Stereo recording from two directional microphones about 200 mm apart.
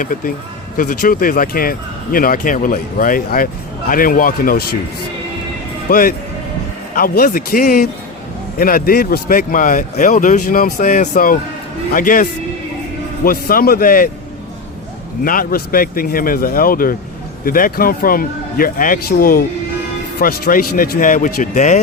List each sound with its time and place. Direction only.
0.0 s speech: 45° left (ahead or behind)
5.9 s speech: 45° left (ahead or behind)
15.2 s speech: 45° left (ahead or behind)